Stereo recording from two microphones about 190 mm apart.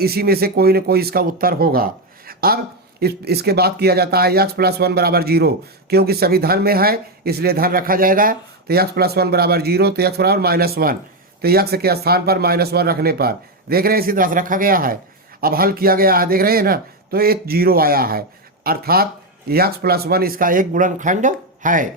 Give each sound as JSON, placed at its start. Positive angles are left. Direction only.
{"t": 0.0, "sound": "speech", "side_deg": -55}